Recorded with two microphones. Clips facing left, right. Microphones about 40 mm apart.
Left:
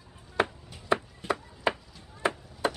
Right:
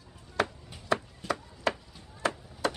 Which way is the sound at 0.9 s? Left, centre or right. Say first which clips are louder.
Left 2 dB; left.